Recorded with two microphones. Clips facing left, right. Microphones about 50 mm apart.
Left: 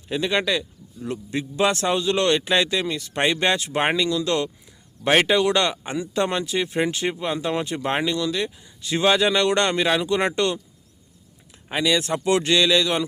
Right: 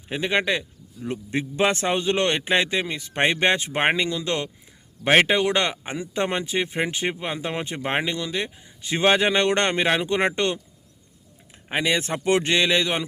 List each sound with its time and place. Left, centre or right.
0.1 s speech: right